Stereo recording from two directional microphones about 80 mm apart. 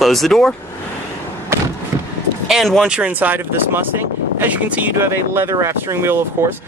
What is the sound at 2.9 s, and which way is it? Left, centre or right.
Speech, centre.